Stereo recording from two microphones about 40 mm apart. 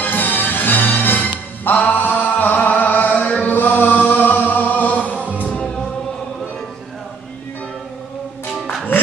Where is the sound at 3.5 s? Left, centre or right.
Left.